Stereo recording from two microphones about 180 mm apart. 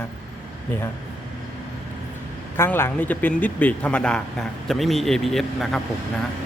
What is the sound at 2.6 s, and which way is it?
Speech, 15° left (ahead or behind).